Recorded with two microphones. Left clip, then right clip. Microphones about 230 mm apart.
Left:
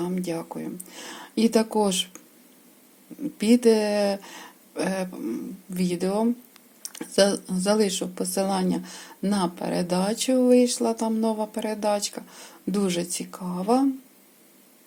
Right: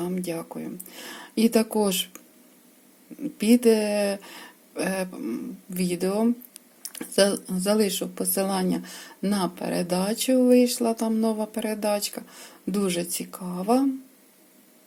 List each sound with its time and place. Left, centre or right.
0.0 s speech: centre